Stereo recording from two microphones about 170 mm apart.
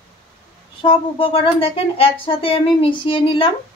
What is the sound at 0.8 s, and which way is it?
A woman's voice, 30° left (ahead or behind).